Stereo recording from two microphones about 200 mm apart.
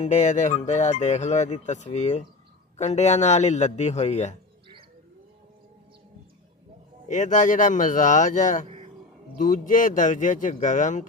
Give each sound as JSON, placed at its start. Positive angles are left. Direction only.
{"t": 0.0, "sound": "speech", "side_deg": 35}
{"t": 7.1, "sound": "speech", "side_deg": 40}